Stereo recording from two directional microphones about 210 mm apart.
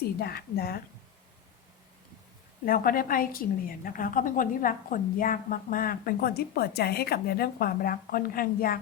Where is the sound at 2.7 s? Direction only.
45° left (ahead or behind).